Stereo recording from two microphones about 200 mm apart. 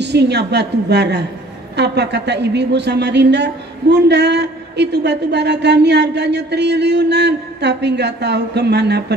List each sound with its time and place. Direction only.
0.0 s speech: 55° right (ahead or behind)